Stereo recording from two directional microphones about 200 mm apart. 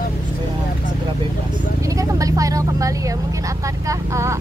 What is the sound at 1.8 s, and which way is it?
Speech, 15° right (ahead or behind).